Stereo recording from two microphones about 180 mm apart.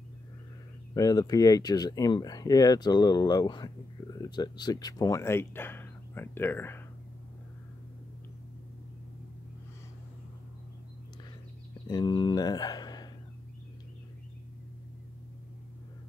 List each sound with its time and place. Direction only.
0.9 s speech: 20° left (ahead or behind)
11.9 s speech: 25° left (ahead or behind)